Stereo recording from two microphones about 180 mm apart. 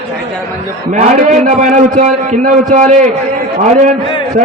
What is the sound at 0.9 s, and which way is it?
A man's voice, 45° right (ahead or behind).